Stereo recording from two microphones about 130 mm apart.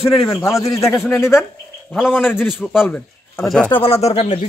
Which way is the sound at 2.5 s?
5° right (ahead or behind).